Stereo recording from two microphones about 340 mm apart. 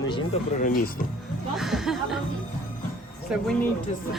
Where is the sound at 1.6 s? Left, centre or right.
Centre.